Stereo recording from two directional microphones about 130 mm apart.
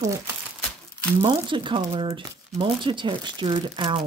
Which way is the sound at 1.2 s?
40° right (ahead or behind).